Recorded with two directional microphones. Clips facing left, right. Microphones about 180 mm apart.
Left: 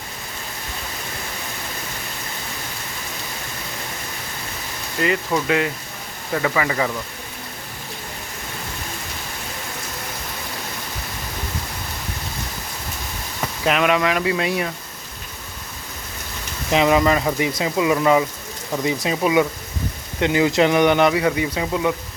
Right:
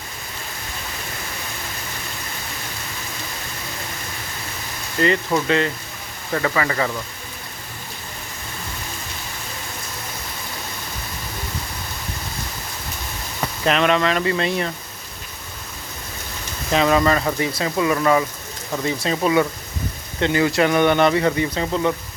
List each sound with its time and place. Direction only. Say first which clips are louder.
4.9 s speech: right 2 dB; 5° left (ahead or behind)
13.7 s speech: even; 5° left (ahead or behind)
16.6 s speech: left 1 dB; 15° left (ahead or behind)